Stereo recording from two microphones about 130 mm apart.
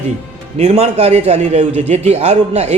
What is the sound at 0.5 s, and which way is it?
Speech, 55° right (ahead or behind).